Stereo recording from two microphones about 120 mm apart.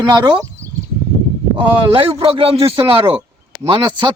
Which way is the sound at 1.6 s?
50° right (ahead or behind).